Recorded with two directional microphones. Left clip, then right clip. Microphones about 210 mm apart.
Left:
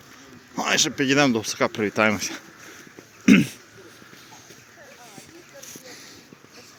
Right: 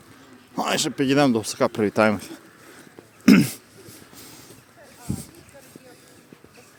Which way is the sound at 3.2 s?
35° right (ahead or behind).